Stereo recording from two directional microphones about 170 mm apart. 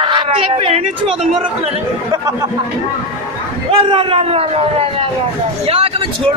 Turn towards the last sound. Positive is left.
turn(degrees=-35)  # may be behind; listen again after turning